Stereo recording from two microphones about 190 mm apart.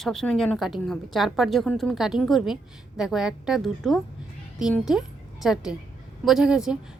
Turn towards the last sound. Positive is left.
turn(degrees=-5)  # may be behind; listen again after turning